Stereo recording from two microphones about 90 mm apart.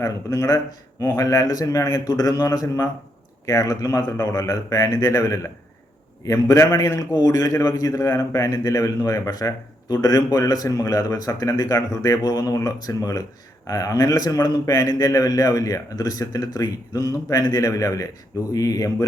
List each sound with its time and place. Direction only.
0.0 s a man's voice: 35° left (ahead or behind)